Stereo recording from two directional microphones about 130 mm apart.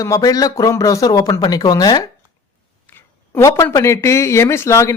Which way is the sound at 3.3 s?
20° left (ahead or behind).